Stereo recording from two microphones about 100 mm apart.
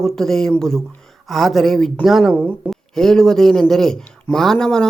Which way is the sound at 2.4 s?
15° right (ahead or behind).